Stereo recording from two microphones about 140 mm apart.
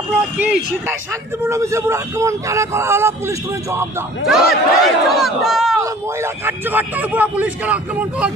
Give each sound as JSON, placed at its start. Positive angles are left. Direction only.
{"t": 1.4, "sound": "a man's voice", "side_deg": -20}
{"t": 4.3, "sound": "speech", "side_deg": 0}
{"t": 5.8, "sound": "a man's voice", "side_deg": -15}